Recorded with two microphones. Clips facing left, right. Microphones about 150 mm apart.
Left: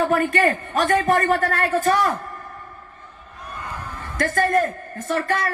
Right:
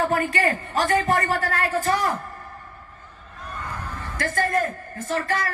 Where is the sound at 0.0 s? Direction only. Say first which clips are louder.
Left 3 dB; 55° left (ahead or behind).